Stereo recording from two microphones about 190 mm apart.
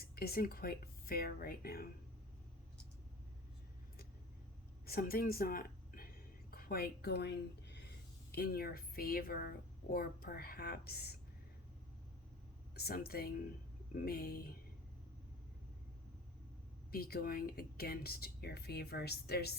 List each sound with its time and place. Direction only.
0.0 s speech: 55° left (ahead or behind)
4.9 s a woman's voice: 50° left (ahead or behind)
12.7 s speech: 55° left (ahead or behind)
16.9 s speech: 55° left (ahead or behind)